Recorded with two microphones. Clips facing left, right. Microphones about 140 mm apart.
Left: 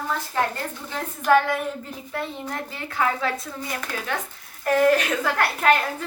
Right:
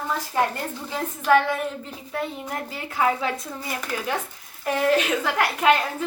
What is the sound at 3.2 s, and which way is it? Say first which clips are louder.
A woman's voice: left 1 dB; 5° right (ahead or behind).